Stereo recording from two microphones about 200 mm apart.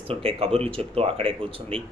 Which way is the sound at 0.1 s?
30° right (ahead or behind).